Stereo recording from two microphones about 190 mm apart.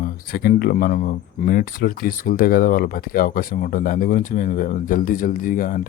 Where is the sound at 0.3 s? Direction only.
55° left (ahead or behind).